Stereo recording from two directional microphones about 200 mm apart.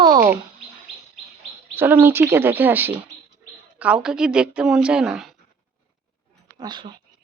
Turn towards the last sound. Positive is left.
turn(degrees=-20)  # may be behind; listen again after turning